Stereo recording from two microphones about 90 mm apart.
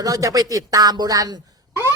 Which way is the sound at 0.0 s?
40° right (ahead or behind).